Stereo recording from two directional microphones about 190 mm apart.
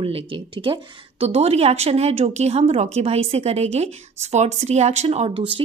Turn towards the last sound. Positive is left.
turn(degrees=-30)  # may be behind; listen again after turning